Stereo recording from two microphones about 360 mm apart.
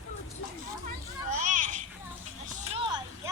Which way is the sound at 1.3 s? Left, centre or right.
Right.